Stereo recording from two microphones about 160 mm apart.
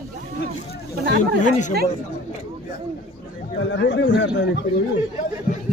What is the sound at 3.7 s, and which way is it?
Speech, 90° left.